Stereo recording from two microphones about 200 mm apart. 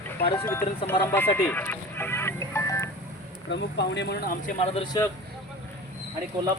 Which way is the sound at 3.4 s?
60° left (ahead or behind).